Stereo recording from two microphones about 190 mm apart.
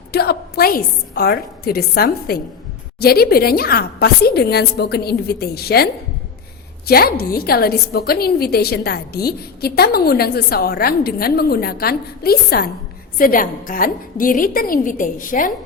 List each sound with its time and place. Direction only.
0.1 s a woman's voice: 55° left (ahead or behind)